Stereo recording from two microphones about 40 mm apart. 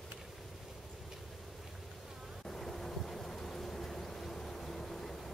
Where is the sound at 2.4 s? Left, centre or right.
Centre.